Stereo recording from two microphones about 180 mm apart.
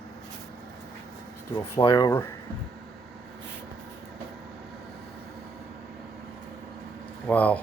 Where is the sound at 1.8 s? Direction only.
25° left (ahead or behind).